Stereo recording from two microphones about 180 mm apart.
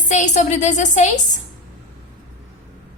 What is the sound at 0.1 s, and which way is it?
A woman's voice, 40° left (ahead or behind).